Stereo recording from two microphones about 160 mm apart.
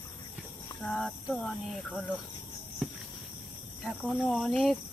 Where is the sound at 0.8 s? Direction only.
Centre (ahead or behind).